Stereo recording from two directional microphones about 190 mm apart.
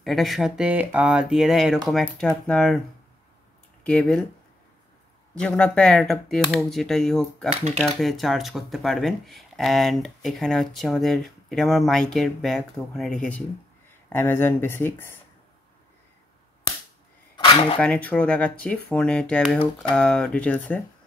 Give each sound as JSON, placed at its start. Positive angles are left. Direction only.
{"t": 0.0, "sound": "speech", "side_deg": 0}
{"t": 3.8, "sound": "speech", "side_deg": 5}
{"t": 5.3, "sound": "speech", "side_deg": 5}
{"t": 17.4, "sound": "cutlery", "side_deg": 25}
{"t": 17.7, "sound": "speech", "side_deg": 5}